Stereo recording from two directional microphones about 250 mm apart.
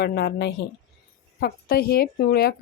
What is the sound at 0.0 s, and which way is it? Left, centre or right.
A woman's voice, left.